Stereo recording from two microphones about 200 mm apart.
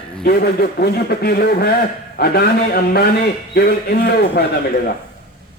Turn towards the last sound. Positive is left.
turn(degrees=50)  # may be behind; listen again after turning